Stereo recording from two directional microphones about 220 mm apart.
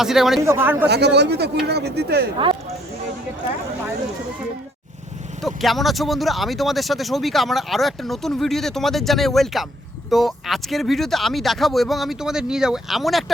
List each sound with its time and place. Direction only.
0.0 s speech: centre (ahead or behind)
0.9 s speech: 50° right (ahead or behind)
5.4 s speech: centre (ahead or behind)